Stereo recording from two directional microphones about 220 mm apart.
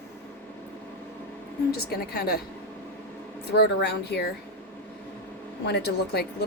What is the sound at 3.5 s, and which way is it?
Speech, 45° left (ahead or behind).